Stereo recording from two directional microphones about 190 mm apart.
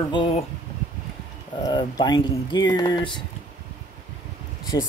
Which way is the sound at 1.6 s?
20° left (ahead or behind).